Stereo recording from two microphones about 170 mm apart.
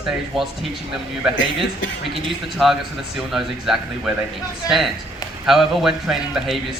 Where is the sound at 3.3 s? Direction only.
Centre (ahead or behind).